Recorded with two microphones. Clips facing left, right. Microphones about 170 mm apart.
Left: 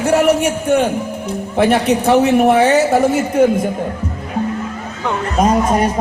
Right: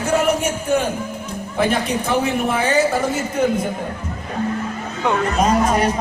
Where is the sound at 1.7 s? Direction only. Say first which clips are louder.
Left 7 dB; 70° left (ahead or behind).